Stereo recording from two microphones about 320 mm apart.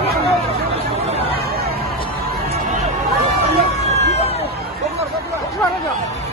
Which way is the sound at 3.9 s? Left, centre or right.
Centre.